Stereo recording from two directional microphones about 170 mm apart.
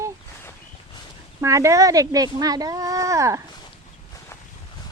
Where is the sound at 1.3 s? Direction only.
15° right (ahead or behind).